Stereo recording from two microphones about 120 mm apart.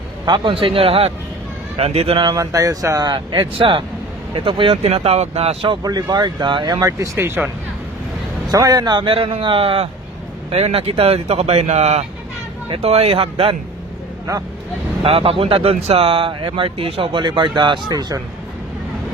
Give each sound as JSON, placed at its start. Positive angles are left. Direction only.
{"t": 0.3, "sound": "speech", "side_deg": -45}
{"t": 2.2, "sound": "speech", "side_deg": -30}
{"t": 5.7, "sound": "speech", "side_deg": -35}
{"t": 8.4, "sound": "speech", "side_deg": -30}
{"t": 12.6, "sound": "speech", "side_deg": -55}
{"t": 15.0, "sound": "speech", "side_deg": -55}